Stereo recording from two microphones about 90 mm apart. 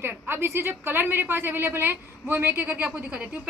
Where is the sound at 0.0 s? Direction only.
25° right (ahead or behind).